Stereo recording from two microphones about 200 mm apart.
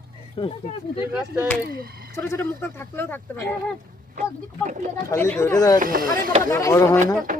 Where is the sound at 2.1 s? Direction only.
10° left (ahead or behind).